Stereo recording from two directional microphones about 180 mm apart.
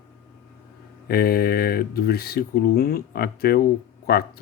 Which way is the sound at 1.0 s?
60° left (ahead or behind).